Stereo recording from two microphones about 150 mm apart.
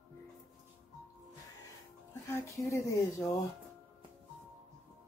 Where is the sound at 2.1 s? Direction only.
20° left (ahead or behind).